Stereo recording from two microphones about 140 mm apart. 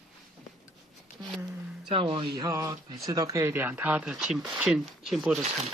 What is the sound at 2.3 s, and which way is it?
Speech, 20° right (ahead or behind).